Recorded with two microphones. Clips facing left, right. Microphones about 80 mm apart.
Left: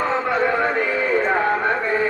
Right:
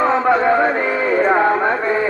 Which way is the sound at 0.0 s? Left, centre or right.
Right.